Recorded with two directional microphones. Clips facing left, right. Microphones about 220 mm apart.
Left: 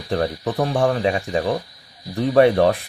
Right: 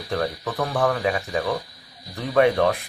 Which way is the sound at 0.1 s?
30° left (ahead or behind).